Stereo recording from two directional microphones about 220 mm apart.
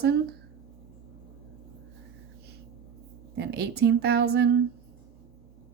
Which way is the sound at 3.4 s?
45° right (ahead or behind).